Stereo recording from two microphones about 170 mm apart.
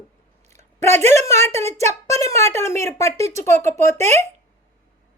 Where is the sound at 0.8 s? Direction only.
15° left (ahead or behind).